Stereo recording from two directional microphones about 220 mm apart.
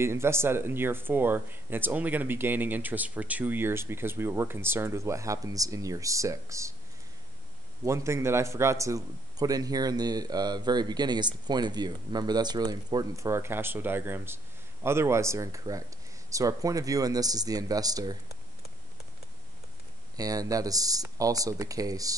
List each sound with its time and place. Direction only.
0.0 s a man's voice: 10° right (ahead or behind)
7.8 s a man's voice: 15° right (ahead or behind)
20.2 s a man's voice: 15° right (ahead or behind)